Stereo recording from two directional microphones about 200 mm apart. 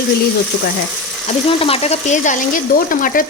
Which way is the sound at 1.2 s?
30° left (ahead or behind).